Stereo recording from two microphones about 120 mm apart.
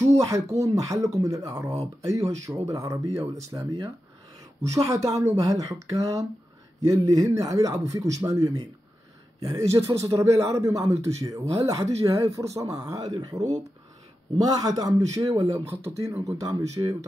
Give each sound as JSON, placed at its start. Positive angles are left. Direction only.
{"t": 0.1, "sound": "a man's voice", "side_deg": -25}
{"t": 1.7, "sound": "speech", "side_deg": -60}
{"t": 2.0, "sound": "a man's voice", "side_deg": -25}
{"t": 14.4, "sound": "a man's voice", "side_deg": -30}